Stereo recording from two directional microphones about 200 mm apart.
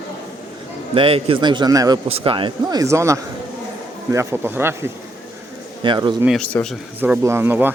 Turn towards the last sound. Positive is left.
turn(degrees=-10)  # may be behind; listen again after turning